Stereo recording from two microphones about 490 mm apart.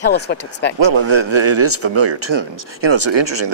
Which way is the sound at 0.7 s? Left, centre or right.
Right.